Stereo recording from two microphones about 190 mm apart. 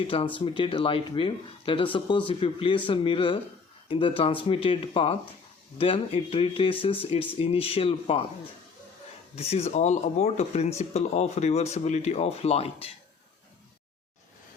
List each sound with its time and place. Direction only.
0.3 s speech: 25° left (ahead or behind)
9.3 s speech: 35° left (ahead or behind)